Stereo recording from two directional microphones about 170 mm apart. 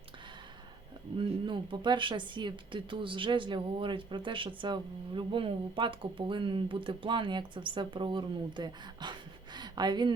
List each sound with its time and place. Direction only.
1.2 s speech: 30° right (ahead or behind)